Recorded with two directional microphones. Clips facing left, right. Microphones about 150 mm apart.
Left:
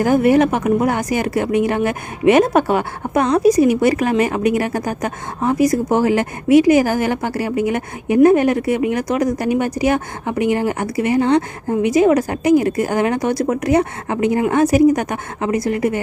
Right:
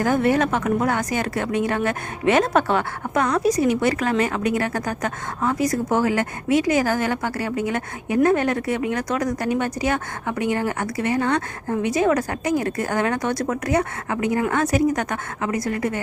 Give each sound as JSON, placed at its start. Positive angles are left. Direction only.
{"t": 0.0, "sound": "speech", "side_deg": 15}